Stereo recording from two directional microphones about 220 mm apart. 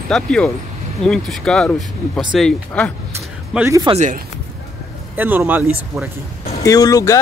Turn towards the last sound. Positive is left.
turn(degrees=15)  # may be behind; listen again after turning